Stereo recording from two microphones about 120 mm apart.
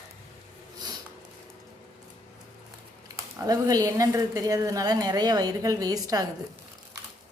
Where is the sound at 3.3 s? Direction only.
30° right (ahead or behind).